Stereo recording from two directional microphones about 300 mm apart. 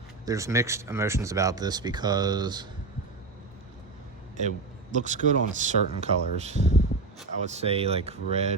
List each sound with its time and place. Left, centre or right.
0.3 s speech: centre
4.4 s speech: right